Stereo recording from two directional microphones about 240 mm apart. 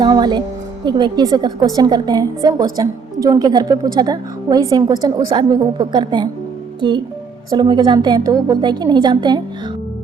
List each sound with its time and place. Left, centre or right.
0.0 s a woman's voice: centre